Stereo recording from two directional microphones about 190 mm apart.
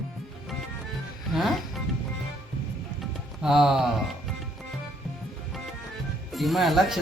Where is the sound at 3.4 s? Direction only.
5° right (ahead or behind).